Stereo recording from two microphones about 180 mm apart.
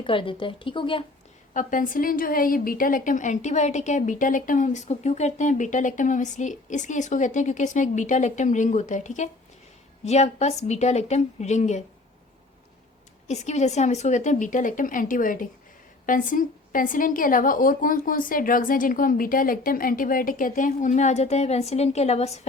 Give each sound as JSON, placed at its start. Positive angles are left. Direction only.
{"t": 0.0, "sound": "speech", "side_deg": 30}
{"t": 1.5, "sound": "a woman's voice", "side_deg": 50}
{"t": 13.2, "sound": "a woman's voice", "side_deg": 40}